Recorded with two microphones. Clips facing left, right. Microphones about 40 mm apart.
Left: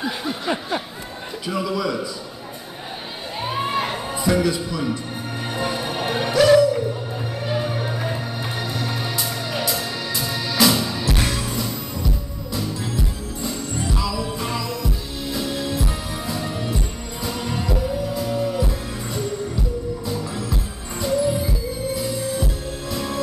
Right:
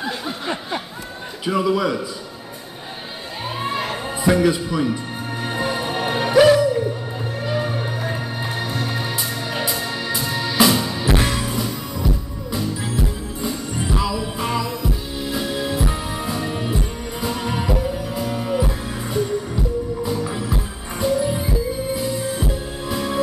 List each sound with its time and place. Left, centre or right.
0.0 s a sound: centre
1.4 s speech: centre
3.4 s crowd: centre
4.2 s speech: centre
5.6 s music: centre